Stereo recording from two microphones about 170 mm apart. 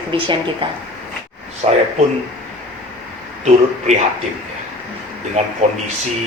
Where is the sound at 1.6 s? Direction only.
40° right (ahead or behind).